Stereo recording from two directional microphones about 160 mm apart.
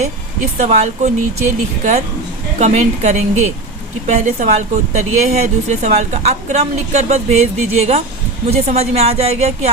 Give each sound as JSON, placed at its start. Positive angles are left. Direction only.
{"t": 0.6, "sound": "a woman's voice", "side_deg": -45}